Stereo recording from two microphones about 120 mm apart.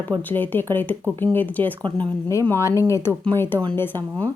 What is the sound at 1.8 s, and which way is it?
Speech, 40° right (ahead or behind).